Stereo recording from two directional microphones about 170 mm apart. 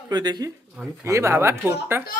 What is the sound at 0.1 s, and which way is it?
Speech, 25° right (ahead or behind).